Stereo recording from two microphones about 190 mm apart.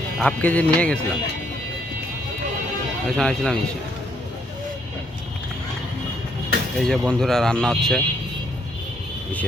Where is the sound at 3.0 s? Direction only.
5° left (ahead or behind).